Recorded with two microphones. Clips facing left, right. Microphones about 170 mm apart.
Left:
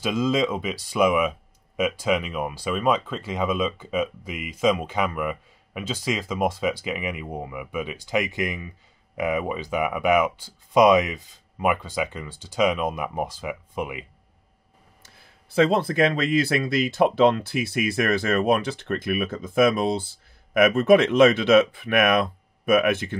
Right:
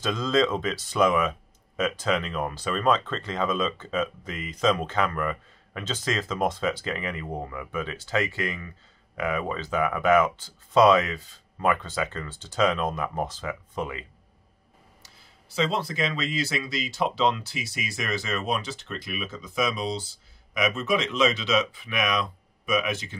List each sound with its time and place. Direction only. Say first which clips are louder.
0.0 s speech: left 1 dB; 10° left (ahead or behind)
15.0 s speech: left 1 dB; 55° left (ahead or behind)